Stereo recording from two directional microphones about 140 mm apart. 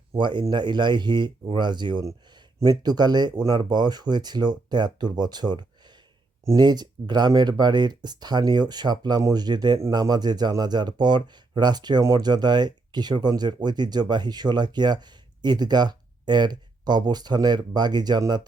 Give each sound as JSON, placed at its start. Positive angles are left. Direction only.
{"t": 0.1, "sound": "speech", "side_deg": -35}